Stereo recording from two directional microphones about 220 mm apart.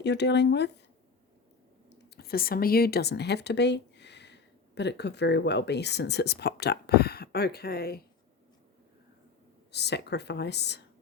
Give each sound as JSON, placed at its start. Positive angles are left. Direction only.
{"t": 0.0, "sound": "speech", "side_deg": 50}
{"t": 1.9, "sound": "speech", "side_deg": 45}
{"t": 9.7, "sound": "speech", "side_deg": 50}